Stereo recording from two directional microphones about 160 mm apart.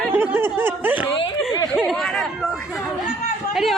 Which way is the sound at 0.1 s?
15° right (ahead or behind).